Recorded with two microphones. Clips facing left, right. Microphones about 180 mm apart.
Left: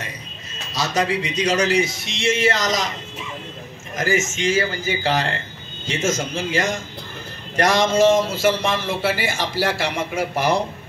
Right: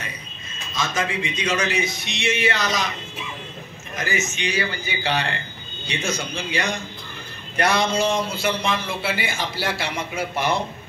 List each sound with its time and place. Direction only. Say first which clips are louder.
0.7 s a man's voice: left 4 dB; 40° left (ahead or behind)
3.9 s a man's voice: left 5 dB; 40° left (ahead or behind)